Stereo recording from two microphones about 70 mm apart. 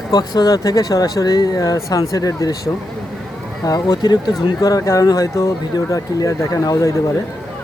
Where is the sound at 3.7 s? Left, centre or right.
Left.